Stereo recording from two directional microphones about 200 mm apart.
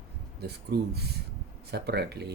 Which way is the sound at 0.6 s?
55° right (ahead or behind).